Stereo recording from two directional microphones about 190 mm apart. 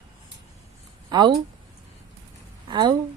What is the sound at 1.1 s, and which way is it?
Mantra, 20° right (ahead or behind).